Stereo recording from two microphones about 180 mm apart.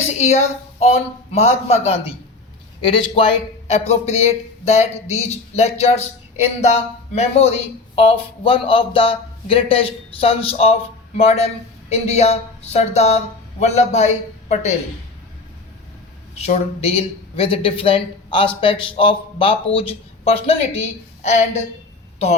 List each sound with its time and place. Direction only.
0.1 s a man's voice: 40° left (ahead or behind)
7.2 s a man's voice: 35° left (ahead or behind)
16.4 s a man's voice: 35° left (ahead or behind)